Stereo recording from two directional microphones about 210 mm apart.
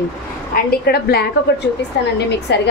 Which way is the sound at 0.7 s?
45° left (ahead or behind).